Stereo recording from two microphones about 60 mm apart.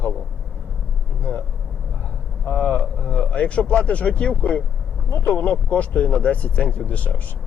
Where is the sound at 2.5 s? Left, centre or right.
Left.